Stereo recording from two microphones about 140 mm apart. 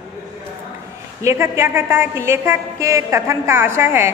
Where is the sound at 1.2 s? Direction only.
20° right (ahead or behind).